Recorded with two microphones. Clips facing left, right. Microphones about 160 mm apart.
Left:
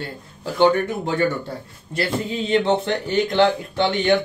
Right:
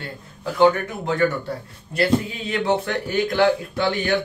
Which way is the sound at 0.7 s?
30° left (ahead or behind).